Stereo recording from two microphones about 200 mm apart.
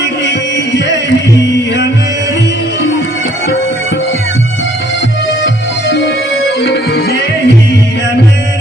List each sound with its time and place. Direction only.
6.6 s music: 55° left (ahead or behind)